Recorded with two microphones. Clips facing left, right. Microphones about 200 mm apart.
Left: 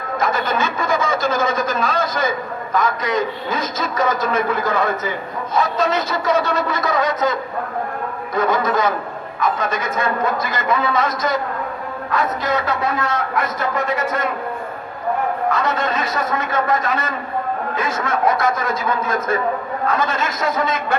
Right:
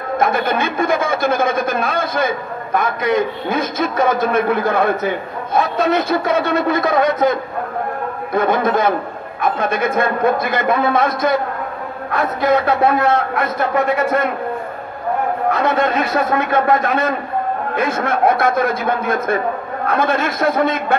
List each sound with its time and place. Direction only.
0.2 s speech: 55° right (ahead or behind)
15.5 s speech: 60° right (ahead or behind)